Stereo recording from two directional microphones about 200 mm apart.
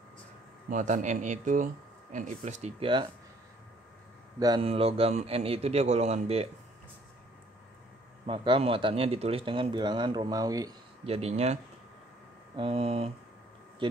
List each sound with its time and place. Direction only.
0.7 s a man's voice: 40° right (ahead or behind)
4.4 s speech: 25° right (ahead or behind)
8.3 s speech: 25° right (ahead or behind)
11.1 s a man's voice: 30° right (ahead or behind)
12.5 s speech: 30° right (ahead or behind)